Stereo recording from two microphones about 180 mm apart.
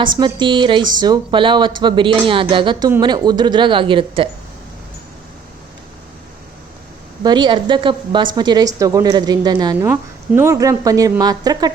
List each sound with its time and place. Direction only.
0.0 s speech: 25° right (ahead or behind)
7.2 s speech: 25° right (ahead or behind)
9.7 s a woman's voice: 10° right (ahead or behind)